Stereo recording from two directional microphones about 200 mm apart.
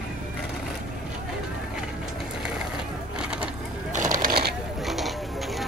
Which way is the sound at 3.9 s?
40° right (ahead or behind).